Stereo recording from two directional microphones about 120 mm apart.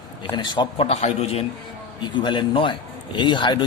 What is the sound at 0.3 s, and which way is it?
Speech, 40° left (ahead or behind).